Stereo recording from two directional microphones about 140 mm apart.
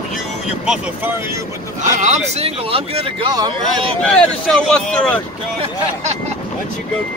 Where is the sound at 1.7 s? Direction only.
55° right (ahead or behind).